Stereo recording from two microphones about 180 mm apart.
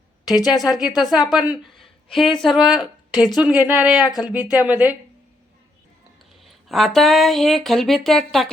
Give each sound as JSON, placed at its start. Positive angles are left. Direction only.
{"t": 0.3, "sound": "speech", "side_deg": 20}
{"t": 0.6, "sound": "speech", "side_deg": 0}
{"t": 4.0, "sound": "speech", "side_deg": 20}
{"t": 4.3, "sound": "speech", "side_deg": -10}
{"t": 6.4, "sound": "speech", "side_deg": 0}